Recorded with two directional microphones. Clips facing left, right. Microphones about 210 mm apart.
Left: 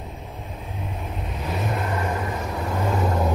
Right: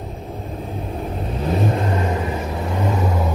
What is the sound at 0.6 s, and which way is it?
Vehicle, 35° right (ahead or behind).